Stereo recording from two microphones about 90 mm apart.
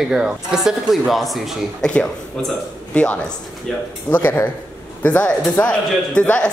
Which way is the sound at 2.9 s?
15° left (ahead or behind).